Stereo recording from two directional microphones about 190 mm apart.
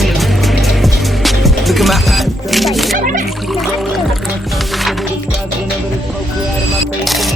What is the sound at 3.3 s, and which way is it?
Music, centre (ahead or behind).